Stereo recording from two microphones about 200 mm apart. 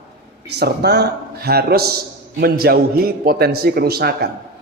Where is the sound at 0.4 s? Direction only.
55° right (ahead or behind).